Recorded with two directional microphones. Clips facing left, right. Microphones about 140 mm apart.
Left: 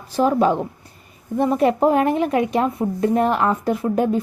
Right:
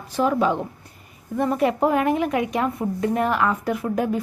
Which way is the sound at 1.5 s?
30° left (ahead or behind).